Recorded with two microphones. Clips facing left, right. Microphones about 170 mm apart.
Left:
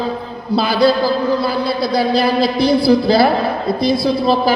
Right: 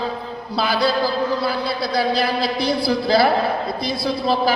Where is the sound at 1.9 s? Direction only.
25° left (ahead or behind).